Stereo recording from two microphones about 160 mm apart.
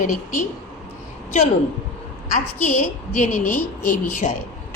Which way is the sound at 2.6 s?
55° left (ahead or behind).